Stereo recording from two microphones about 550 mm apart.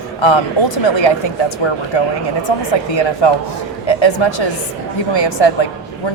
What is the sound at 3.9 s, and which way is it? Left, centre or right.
Speech, left.